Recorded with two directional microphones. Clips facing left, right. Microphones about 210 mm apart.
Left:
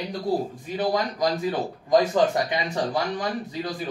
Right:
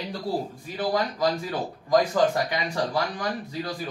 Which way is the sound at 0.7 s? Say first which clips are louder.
Left 1 dB; 20° left (ahead or behind).